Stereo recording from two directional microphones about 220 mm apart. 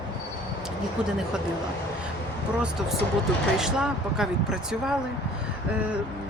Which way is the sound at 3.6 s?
Centre (ahead or behind).